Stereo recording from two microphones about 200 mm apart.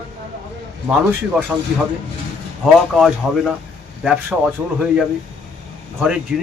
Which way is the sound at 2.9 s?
Centre (ahead or behind).